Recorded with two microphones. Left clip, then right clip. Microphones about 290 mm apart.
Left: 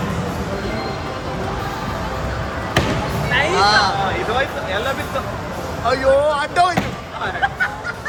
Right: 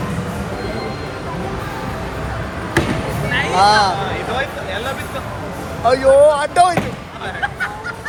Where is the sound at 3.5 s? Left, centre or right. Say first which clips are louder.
Right 4 dB; centre.